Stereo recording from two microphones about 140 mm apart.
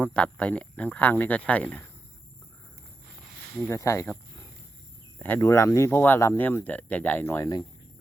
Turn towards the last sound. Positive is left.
turn(degrees=25)  # may be behind; listen again after turning